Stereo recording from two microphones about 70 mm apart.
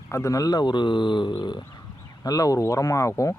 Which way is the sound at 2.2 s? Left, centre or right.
Left.